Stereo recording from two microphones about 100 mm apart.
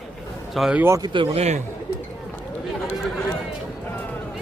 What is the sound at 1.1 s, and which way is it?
Speech, 75° right (ahead or behind).